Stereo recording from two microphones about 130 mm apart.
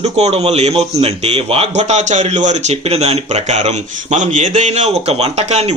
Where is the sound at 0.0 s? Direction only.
55° right (ahead or behind).